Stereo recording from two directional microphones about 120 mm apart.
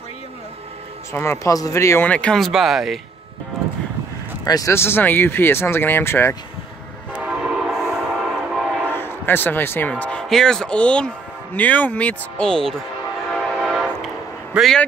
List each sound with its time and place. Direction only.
1.1 s speech: 20° left (ahead or behind)
2.0 s speech: 10° left (ahead or behind)
4.5 s speech: 25° left (ahead or behind)
7.2 s train horn: 5° right (ahead or behind)
8.5 s train: 5° right (ahead or behind)
8.9 s a man's voice: 20° left (ahead or behind)
13.6 s train: 5° right (ahead or behind)
14.5 s speech: centre (ahead or behind)